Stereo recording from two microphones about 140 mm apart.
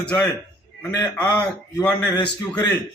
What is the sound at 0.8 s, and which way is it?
Speech, 20° left (ahead or behind).